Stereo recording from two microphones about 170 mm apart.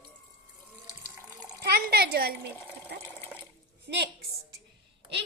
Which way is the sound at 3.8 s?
80° right.